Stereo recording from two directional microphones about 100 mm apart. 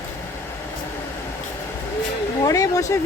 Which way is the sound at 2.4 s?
35° left (ahead or behind).